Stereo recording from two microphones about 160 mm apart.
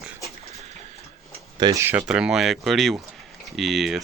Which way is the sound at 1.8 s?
10° right (ahead or behind).